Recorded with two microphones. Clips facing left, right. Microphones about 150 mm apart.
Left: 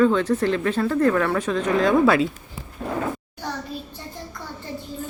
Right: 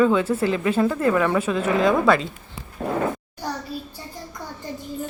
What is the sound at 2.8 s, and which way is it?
Speech, 55° right (ahead or behind).